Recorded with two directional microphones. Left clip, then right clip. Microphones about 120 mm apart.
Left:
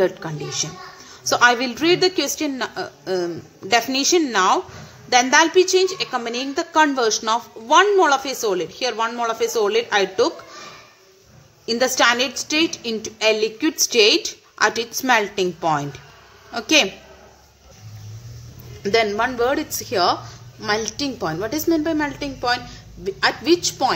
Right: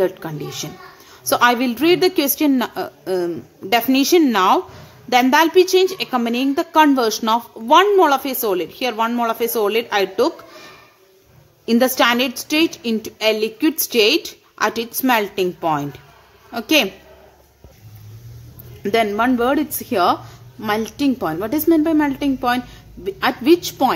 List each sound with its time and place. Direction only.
0.3 s a woman's voice: 25° right (ahead or behind)
3.1 s a woman's voice: 20° right (ahead or behind)
18.8 s speech: 50° right (ahead or behind)